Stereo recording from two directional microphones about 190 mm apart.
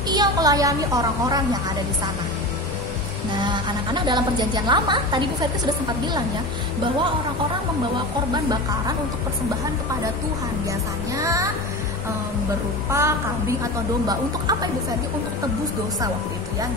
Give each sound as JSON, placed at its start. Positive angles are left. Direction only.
{"t": 0.1, "sound": "a woman's voice", "side_deg": -20}
{"t": 3.3, "sound": "a woman's voice", "side_deg": -25}
{"t": 10.7, "sound": "speech", "side_deg": -15}
{"t": 12.9, "sound": "a woman's voice", "side_deg": -15}